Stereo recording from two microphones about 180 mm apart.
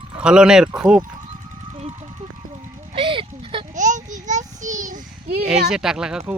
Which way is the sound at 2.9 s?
30° right (ahead or behind).